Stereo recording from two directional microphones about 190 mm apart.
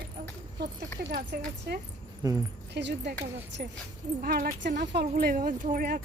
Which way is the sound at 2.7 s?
65° right (ahead or behind).